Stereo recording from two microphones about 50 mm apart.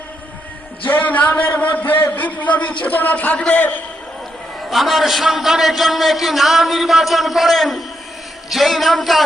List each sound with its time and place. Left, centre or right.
0.9 s a man's voice: left
4.7 s a man's voice: centre